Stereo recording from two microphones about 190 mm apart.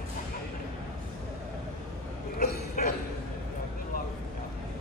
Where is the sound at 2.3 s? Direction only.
50° left (ahead or behind).